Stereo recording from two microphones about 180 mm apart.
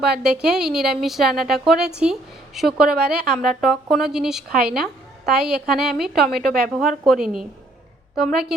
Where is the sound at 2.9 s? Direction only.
60° right (ahead or behind).